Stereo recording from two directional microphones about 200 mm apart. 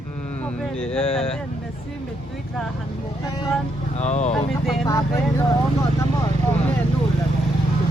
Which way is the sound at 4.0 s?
35° left (ahead or behind).